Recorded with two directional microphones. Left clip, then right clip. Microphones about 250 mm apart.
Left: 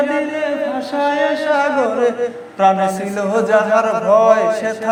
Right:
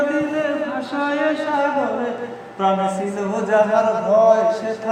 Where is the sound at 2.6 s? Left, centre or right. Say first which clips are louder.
Left 5 dB; left.